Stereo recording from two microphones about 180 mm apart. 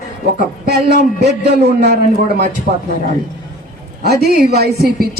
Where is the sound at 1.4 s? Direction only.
65° right (ahead or behind).